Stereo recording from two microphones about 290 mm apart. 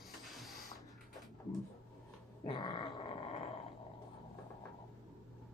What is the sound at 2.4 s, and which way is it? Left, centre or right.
Dog, centre.